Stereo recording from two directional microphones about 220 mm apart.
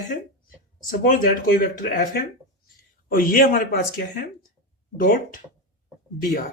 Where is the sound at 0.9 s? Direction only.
40° left (ahead or behind).